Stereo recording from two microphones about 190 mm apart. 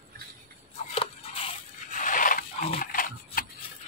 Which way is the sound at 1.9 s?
45° left (ahead or behind).